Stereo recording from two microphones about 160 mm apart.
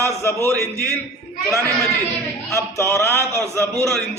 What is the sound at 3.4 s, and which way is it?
Speech, 15° right (ahead or behind).